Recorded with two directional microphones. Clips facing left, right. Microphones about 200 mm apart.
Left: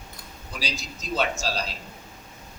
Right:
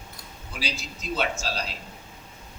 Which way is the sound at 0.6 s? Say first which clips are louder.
Even; 40° left (ahead or behind).